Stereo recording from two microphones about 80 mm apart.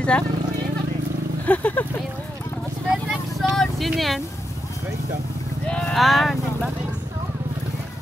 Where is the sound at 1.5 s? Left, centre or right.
Centre.